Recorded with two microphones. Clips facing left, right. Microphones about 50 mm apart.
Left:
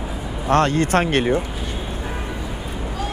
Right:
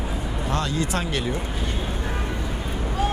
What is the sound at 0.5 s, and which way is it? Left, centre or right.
Speech, left.